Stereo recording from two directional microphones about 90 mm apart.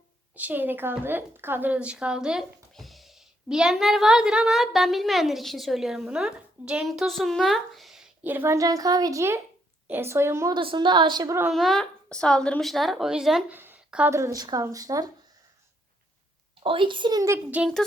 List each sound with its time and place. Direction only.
0.3 s speech: 20° right (ahead or behind); by 8.1 s 5° right (ahead or behind)
8.2 s a woman's voice: 20° right (ahead or behind)
8.4 s speech: 40° right (ahead or behind)
9.8 s speech: 25° right (ahead or behind)
10.5 s a woman's voice: 65° right (ahead or behind)
11.5 s speech: 5° left (ahead or behind)
13.5 s a sound: 20° right (ahead or behind)
14.1 s speech: 35° right (ahead or behind)
16.6 s a woman's voice: 65° right (ahead or behind)
17.2 s speech: 30° right (ahead or behind)